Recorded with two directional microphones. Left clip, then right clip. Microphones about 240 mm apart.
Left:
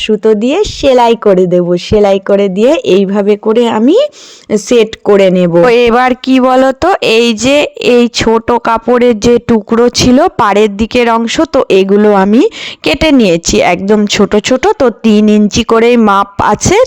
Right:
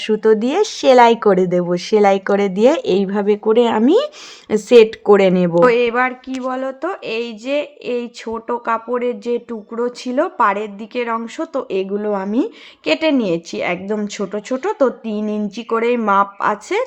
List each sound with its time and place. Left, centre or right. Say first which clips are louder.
0.1 s speech: left 5 dB; centre
5.6 s speech: left 8 dB; left